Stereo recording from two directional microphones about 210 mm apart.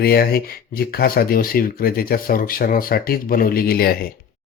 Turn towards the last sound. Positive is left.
turn(degrees=45)  # may be behind; listen again after turning